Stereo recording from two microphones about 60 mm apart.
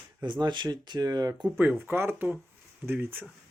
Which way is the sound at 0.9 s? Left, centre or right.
Right.